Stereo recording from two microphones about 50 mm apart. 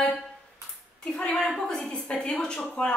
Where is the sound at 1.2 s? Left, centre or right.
Centre.